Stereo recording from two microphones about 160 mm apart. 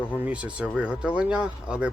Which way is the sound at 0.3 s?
5° right (ahead or behind).